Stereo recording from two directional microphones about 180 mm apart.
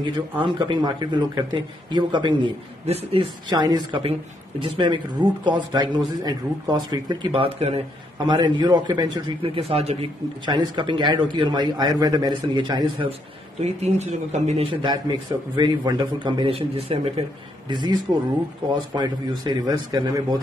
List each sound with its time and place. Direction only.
0.0 s a man's voice: 25° right (ahead or behind)
13.6 s a man's voice: 40° right (ahead or behind)
18.9 s a man's voice: 25° right (ahead or behind)